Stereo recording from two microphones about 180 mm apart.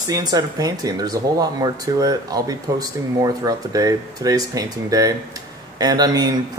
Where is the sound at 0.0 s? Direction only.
20° right (ahead or behind).